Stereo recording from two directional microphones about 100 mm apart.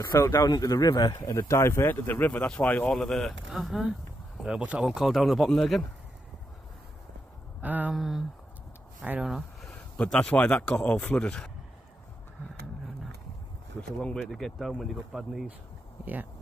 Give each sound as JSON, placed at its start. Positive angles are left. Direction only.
{"t": 0.0, "sound": "a man's voice", "side_deg": 35}
{"t": 2.9, "sound": "a man's voice", "side_deg": 5}
{"t": 7.6, "sound": "speech", "side_deg": -15}
{"t": 7.9, "sound": "a man's voice", "side_deg": -5}
{"t": 9.0, "sound": "speech", "side_deg": -15}
{"t": 9.3, "sound": "speech", "side_deg": 0}
{"t": 13.9, "sound": "a man's voice", "side_deg": 5}